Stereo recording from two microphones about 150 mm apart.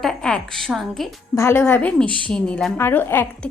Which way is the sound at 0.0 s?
5° left (ahead or behind).